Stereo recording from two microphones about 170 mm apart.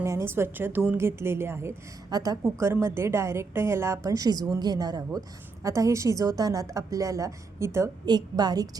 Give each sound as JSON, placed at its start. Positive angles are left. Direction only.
{"t": 0.0, "sound": "a woman's voice", "side_deg": -15}